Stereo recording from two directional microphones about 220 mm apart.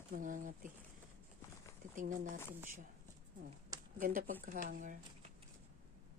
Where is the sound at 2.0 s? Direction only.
35° right (ahead or behind).